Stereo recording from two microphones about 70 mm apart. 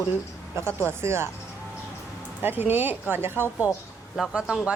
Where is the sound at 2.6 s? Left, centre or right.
Right.